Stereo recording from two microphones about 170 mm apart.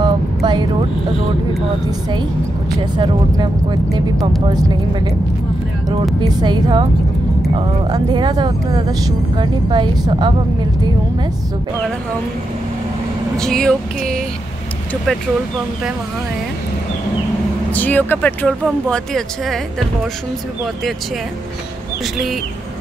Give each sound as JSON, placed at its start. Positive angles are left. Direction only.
{"t": 0.0, "sound": "vehicle", "side_deg": -25}
{"t": 1.9, "sound": "speech", "side_deg": -25}
{"t": 4.5, "sound": "speech", "side_deg": -20}
{"t": 6.2, "sound": "speech", "side_deg": -25}
{"t": 13.4, "sound": "speech", "side_deg": 5}
{"t": 17.7, "sound": "speech", "side_deg": 10}